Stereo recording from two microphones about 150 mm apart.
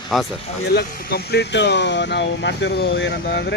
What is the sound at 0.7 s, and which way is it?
Speech, 90° left.